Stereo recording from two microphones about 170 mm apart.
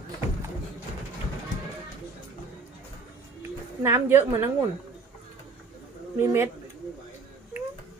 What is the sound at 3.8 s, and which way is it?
Speech, 10° right (ahead or behind).